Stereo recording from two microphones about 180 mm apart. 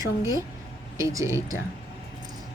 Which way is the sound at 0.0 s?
15° right (ahead or behind).